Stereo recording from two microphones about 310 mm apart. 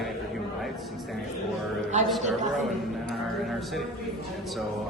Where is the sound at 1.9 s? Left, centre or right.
Right.